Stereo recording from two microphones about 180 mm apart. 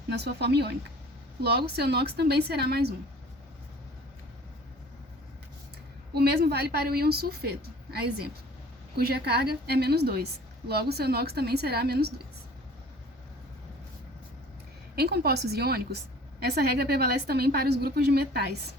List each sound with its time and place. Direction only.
0.1 s a woman's voice: 65° right (ahead or behind)
6.1 s a woman's voice: 60° right (ahead or behind)
14.9 s a woman's voice: 60° right (ahead or behind)